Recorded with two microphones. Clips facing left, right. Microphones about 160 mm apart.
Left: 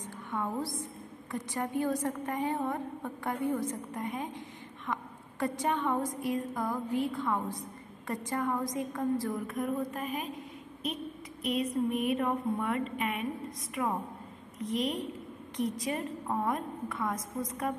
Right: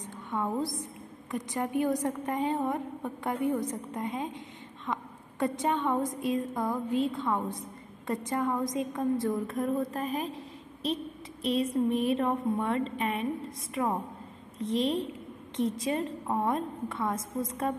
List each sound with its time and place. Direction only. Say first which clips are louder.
0.0 s a woman's voice: right 2 dB; 20° right (ahead or behind)